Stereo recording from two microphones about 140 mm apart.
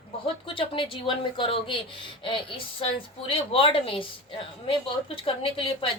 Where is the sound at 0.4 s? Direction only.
40° left (ahead or behind).